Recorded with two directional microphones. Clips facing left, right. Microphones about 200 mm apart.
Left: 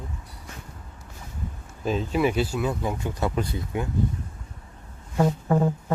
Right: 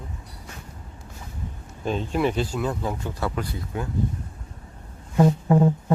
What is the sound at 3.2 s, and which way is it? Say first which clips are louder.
Speech: left 2 dB; 20° left (ahead or behind).